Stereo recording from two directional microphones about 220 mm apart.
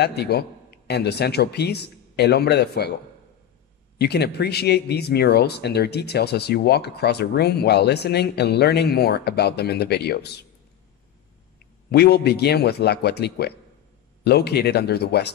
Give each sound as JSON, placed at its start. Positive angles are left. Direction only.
{"t": 0.0, "sound": "a man's voice", "side_deg": 50}
{"t": 4.0, "sound": "speech", "side_deg": 45}
{"t": 11.9, "sound": "speech", "side_deg": 45}